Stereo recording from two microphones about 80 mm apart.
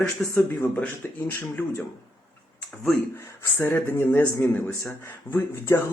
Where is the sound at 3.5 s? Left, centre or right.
Left.